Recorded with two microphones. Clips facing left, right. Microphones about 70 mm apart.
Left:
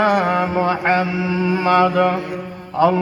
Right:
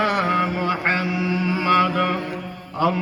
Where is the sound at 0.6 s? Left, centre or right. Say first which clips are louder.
Left 5 dB; left.